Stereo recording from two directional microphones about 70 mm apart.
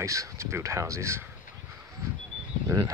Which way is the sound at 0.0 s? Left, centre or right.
Right.